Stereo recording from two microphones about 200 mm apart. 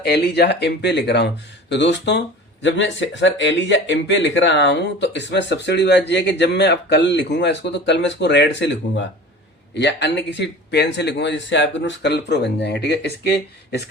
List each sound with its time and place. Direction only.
0.0 s speech: 55° left (ahead or behind)